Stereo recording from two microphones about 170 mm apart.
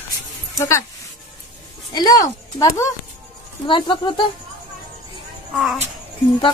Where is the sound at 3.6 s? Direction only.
30° left (ahead or behind).